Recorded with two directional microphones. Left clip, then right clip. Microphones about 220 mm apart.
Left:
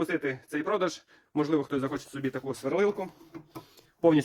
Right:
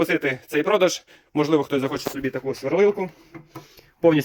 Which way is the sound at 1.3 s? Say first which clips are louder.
Right 8 dB; 5° left (ahead or behind).